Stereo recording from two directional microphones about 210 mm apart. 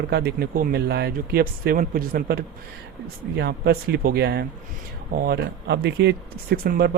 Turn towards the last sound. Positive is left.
turn(degrees=-45)  # may be behind; listen again after turning